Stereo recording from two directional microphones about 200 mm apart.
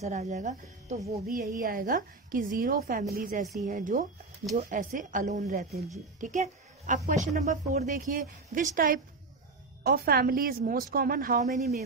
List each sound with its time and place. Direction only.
0.0 s a woman's voice: 35° right (ahead or behind)